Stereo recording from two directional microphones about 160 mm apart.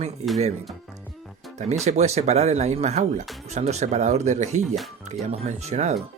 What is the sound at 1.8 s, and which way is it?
Speech, 45° right (ahead or behind).